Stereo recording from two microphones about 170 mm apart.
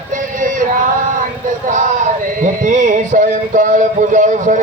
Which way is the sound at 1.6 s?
45° right (ahead or behind).